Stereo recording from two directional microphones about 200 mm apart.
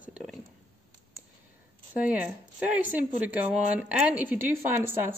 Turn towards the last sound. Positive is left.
turn(degrees=-10)  # may be behind; listen again after turning